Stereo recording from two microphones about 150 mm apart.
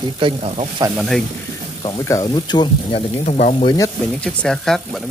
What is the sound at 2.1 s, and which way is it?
Speech, 25° left (ahead or behind).